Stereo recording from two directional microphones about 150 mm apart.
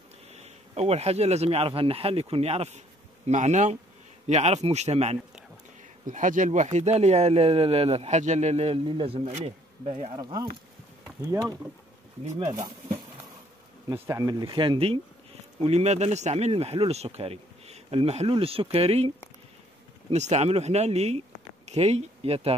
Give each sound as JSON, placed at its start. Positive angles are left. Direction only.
{"t": 0.3, "sound": "speech", "side_deg": -45}
{"t": 6.0, "sound": "speech", "side_deg": -60}
{"t": 10.1, "sound": "speech", "side_deg": -25}
{"t": 11.2, "sound": "speech", "side_deg": -15}
{"t": 13.8, "sound": "speech", "side_deg": -20}
{"t": 14.4, "sound": "speech", "side_deg": -30}
{"t": 15.6, "sound": "speech", "side_deg": -45}